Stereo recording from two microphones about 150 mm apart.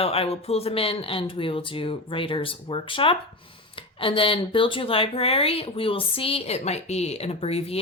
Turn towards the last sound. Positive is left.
turn(degrees=40)  # may be behind; listen again after turning